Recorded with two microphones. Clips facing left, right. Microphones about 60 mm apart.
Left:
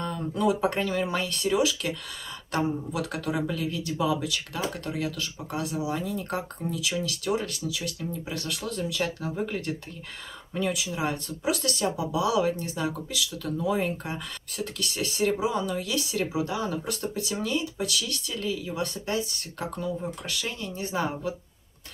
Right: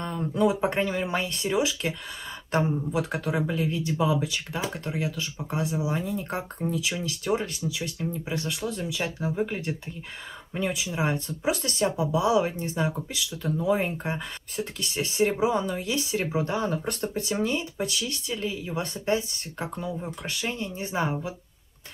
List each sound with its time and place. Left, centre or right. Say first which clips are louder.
0.0 s speech: right 2 dB; right